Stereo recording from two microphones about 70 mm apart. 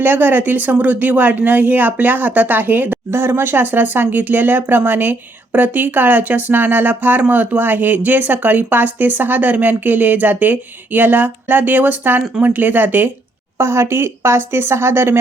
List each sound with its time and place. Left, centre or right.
0.0 s speech: right
13.6 s a woman's voice: right